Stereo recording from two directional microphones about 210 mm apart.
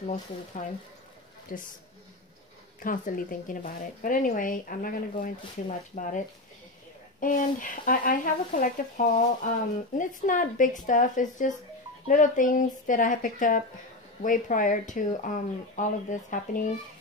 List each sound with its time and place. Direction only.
0.0 s speech: 35° left (ahead or behind)
2.8 s speech: 40° left (ahead or behind)